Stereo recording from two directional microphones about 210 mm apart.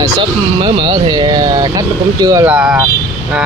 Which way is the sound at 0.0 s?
25° right (ahead or behind).